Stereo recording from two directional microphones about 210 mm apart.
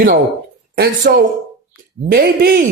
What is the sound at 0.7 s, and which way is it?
Speech, 45° right (ahead or behind).